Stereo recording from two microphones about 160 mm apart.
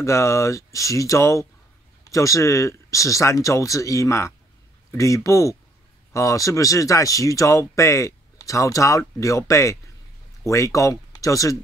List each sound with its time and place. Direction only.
0.0 s speech: 20° left (ahead or behind)